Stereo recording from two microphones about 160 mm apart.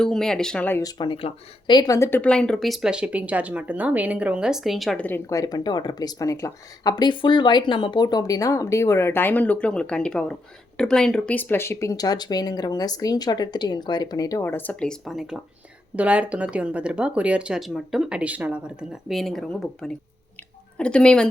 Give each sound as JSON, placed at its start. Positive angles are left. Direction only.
{"t": 0.0, "sound": "speech", "side_deg": 5}
{"t": 0.8, "sound": "speech", "side_deg": 25}